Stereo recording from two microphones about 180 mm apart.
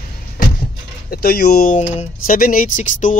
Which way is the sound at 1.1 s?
60° left (ahead or behind).